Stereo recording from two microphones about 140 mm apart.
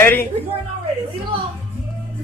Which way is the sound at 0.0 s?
15° left (ahead or behind).